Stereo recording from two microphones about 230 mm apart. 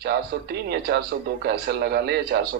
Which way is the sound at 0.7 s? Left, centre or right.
Right.